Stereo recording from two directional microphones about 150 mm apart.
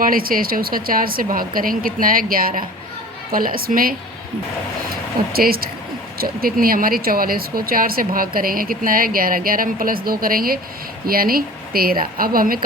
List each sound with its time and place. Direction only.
0.0 s speech: 75° right (ahead or behind)
5.3 s speech: 80° right